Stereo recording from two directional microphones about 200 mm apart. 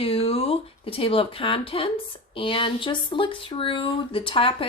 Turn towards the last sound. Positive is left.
turn(degrees=25)  # may be behind; listen again after turning